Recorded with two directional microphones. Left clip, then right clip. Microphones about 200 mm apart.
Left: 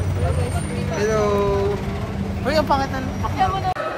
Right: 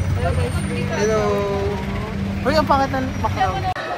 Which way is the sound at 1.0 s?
10° left (ahead or behind).